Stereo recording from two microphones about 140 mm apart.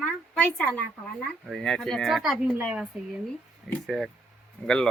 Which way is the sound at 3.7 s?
5° left (ahead or behind).